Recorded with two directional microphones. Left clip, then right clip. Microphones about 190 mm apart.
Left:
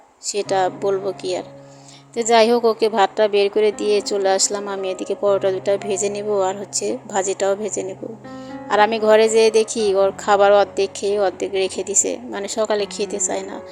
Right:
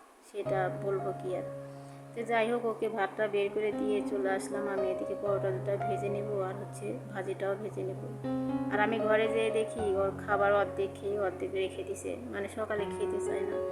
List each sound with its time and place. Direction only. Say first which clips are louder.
0.3 s speech: left 12 dB; 35° left (ahead or behind)
8.7 s speech: left 15 dB; 40° left (ahead or behind)